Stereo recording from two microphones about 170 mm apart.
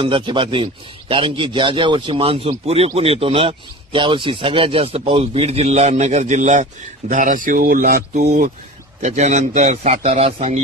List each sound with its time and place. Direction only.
0.0 s a man's voice: 30° right (ahead or behind); by 8.5 s 55° right (ahead or behind)
9.0 s a man's voice: 40° right (ahead or behind)